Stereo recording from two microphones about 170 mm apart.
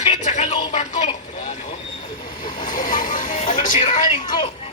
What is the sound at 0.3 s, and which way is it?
Music, 45° left (ahead or behind).